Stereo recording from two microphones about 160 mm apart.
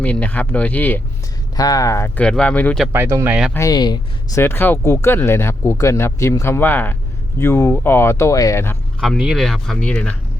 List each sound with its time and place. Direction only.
0.0 s speech: 10° left (ahead or behind)
1.5 s speech: 25° left (ahead or behind)
2.2 s speech: 5° left (ahead or behind)
2.8 s speech: 15° right (ahead or behind)
3.5 s speech: 20° left (ahead or behind)
9.0 s speech: centre (ahead or behind)